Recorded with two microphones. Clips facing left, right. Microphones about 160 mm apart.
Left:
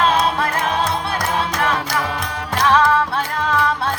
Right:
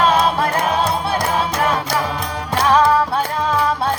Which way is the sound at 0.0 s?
30° right (ahead or behind).